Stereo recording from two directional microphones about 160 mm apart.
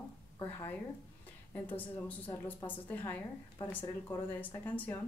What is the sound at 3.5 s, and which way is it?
Speech, 25° left (ahead or behind).